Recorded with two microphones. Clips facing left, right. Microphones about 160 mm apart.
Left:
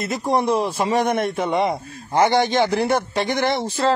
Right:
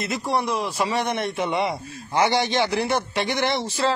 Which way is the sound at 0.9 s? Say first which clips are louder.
Left 5 dB; 50° left (ahead or behind).